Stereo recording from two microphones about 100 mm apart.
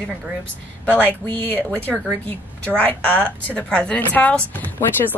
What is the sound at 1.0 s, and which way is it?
A woman's voice, 15° left (ahead or behind).